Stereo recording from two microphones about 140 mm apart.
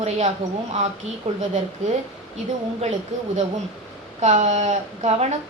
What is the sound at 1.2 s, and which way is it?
Speech, 50° right (ahead or behind).